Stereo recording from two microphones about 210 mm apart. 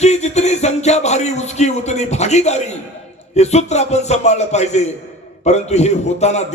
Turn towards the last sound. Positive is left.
turn(degrees=30)  # may be behind; listen again after turning